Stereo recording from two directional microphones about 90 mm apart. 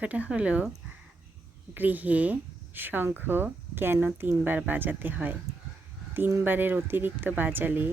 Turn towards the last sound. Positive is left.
turn(degrees=-20)  # may be behind; listen again after turning